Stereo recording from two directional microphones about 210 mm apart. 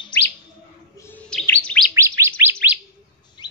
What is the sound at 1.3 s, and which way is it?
Bird, 5° left (ahead or behind).